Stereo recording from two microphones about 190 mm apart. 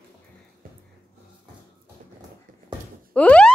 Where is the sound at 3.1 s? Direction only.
5° left (ahead or behind).